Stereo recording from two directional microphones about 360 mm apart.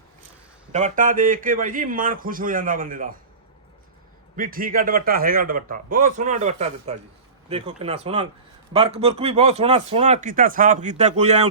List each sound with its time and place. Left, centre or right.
0.7 s a man's voice: centre
4.4 s a man's voice: right